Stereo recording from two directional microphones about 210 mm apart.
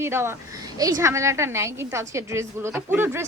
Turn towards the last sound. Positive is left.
turn(degrees=-10)  # may be behind; listen again after turning